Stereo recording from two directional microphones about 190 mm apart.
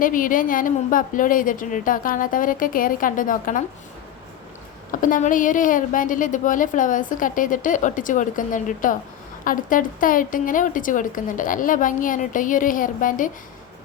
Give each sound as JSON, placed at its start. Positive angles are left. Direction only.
{"t": 0.0, "sound": "a woman's voice", "side_deg": 45}
{"t": 4.9, "sound": "a woman's voice", "side_deg": 45}